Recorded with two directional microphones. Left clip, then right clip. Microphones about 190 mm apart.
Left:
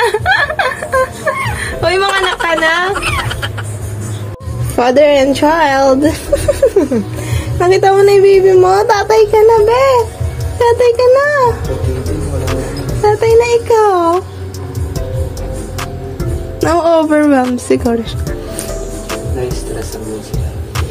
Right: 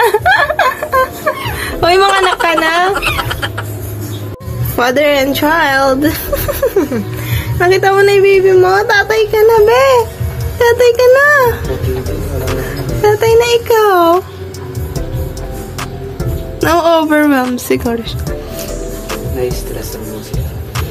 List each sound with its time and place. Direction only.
0.0 s a sound: 20° right (ahead or behind)
2.9 s a sound: centre (ahead or behind)
4.7 s a woman's voice: 10° left (ahead or behind)
9.4 s speech: centre (ahead or behind)
9.7 s music: 10° right (ahead or behind)
10.6 s speech: centre (ahead or behind)
12.4 s music: centre (ahead or behind)
16.2 s speech: 5° left (ahead or behind)